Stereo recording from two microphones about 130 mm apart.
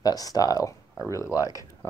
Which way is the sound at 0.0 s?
30° left (ahead or behind).